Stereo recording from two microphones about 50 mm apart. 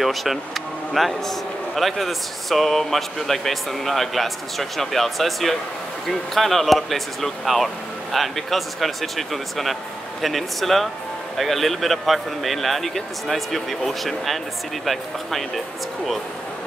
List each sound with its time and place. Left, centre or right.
0.0 s speech: centre